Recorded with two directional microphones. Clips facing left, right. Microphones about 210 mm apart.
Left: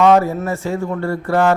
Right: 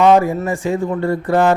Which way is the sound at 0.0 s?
15° right (ahead or behind).